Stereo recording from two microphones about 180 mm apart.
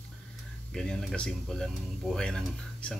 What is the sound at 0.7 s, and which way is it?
Speech, 5° left (ahead or behind).